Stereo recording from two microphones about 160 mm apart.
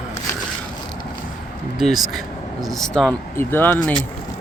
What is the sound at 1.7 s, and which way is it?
Speech, centre (ahead or behind).